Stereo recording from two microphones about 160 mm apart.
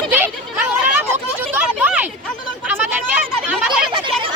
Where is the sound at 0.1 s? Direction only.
10° right (ahead or behind).